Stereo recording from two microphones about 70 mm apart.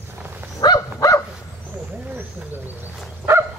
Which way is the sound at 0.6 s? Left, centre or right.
Left.